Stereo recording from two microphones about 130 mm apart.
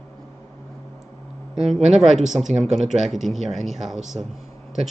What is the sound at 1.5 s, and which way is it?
Speech, centre (ahead or behind).